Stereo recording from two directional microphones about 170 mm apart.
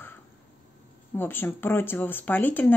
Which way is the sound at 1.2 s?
10° left (ahead or behind).